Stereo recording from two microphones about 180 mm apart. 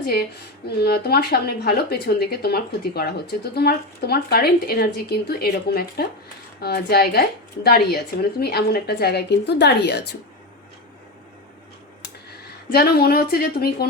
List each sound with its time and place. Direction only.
0.0 s speech: 60° left (ahead or behind)
12.3 s speech: 60° left (ahead or behind)